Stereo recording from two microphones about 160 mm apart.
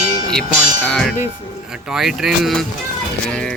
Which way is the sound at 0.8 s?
5° left (ahead or behind).